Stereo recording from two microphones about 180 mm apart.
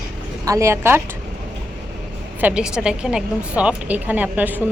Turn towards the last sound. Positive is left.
turn(degrees=-10)  # may be behind; listen again after turning